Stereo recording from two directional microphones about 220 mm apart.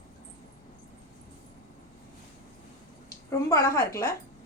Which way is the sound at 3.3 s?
15° left (ahead or behind).